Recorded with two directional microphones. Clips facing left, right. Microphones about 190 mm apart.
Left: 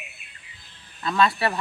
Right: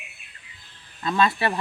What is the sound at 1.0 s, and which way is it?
Speech, 20° right (ahead or behind).